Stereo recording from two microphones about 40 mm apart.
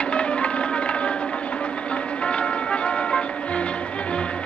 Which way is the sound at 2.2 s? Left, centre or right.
Left.